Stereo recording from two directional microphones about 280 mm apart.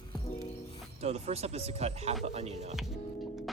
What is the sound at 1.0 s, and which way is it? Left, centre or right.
Speech, right.